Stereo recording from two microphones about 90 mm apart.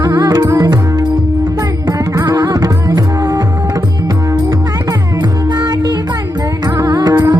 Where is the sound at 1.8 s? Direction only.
40° right (ahead or behind).